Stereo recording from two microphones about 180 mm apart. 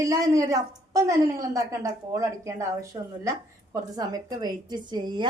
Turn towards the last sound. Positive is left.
turn(degrees=-25)  # may be behind; listen again after turning